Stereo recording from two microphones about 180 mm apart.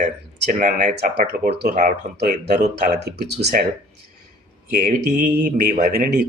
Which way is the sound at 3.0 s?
65° right (ahead or behind).